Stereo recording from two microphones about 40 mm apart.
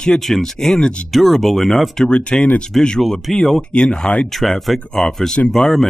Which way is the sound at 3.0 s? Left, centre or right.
Centre.